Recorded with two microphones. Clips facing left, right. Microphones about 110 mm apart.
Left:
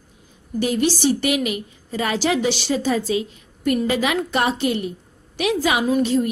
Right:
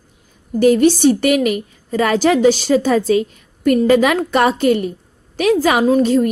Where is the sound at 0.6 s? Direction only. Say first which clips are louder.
Right 9 dB; 45° right (ahead or behind).